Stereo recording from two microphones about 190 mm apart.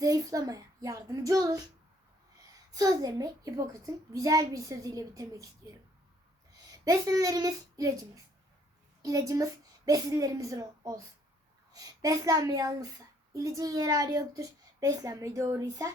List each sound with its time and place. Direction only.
0.0 s speech: 20° right (ahead or behind)
2.7 s a child's voice: 20° right (ahead or behind)
6.8 s a child's voice: 20° right (ahead or behind)